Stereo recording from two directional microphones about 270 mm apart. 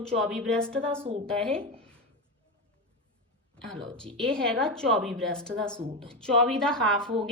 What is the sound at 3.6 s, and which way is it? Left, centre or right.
A woman's voice, centre.